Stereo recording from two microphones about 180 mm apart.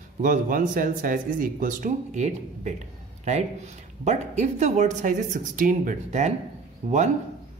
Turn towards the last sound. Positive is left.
turn(degrees=-40)  # may be behind; listen again after turning